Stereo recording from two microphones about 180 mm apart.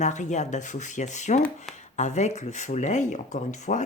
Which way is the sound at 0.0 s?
40° left (ahead or behind).